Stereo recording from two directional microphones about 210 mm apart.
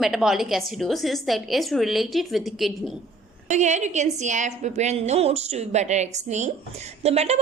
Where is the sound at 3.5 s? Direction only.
35° right (ahead or behind).